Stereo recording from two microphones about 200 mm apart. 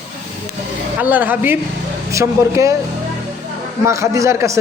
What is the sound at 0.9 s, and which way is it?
Speech, 10° right (ahead or behind).